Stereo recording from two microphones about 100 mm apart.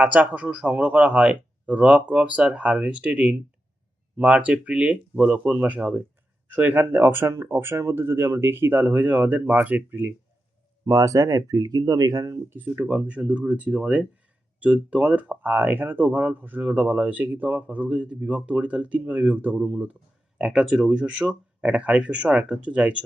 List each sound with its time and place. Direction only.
0.0 s speech: 15° right (ahead or behind)
10.8 s speech: 35° right (ahead or behind)
12.5 s speech: 20° right (ahead or behind)